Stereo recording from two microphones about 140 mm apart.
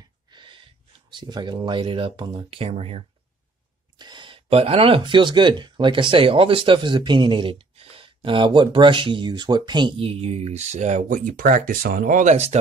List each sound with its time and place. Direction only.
0.3 s a sound: 35° right (ahead or behind)
1.1 s speech: 30° right (ahead or behind)
2.7 s speech: 45° right (ahead or behind)
4.0 s speech: 35° right (ahead or behind); by 12.5 s 55° right (ahead or behind)